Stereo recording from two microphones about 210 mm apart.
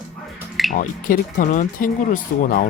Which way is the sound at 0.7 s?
40° left (ahead or behind).